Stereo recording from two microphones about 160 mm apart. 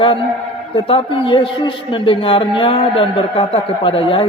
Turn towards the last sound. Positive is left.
turn(degrees=35)  # may be behind; listen again after turning